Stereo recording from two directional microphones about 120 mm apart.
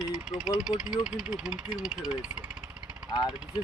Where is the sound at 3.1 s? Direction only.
30° left (ahead or behind).